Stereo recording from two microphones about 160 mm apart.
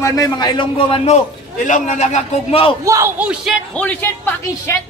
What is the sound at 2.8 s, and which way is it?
Speech, 20° right (ahead or behind).